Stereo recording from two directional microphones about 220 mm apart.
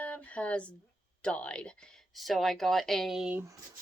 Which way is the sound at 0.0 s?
5° left (ahead or behind).